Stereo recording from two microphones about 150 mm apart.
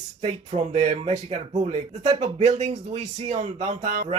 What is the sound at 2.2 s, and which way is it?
Speech, 50° right (ahead or behind).